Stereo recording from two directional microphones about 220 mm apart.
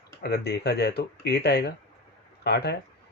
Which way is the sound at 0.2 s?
50° left (ahead or behind).